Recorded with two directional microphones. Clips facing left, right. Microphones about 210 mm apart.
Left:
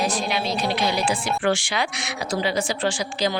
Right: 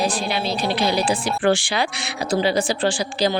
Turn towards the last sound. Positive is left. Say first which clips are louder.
# right 3 dB
turn(degrees=-30)  # may be behind; listen again after turning